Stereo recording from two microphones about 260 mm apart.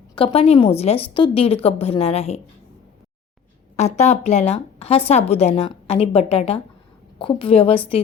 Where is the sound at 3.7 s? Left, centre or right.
Left.